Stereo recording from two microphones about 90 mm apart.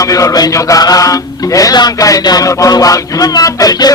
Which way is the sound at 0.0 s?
40° left (ahead or behind).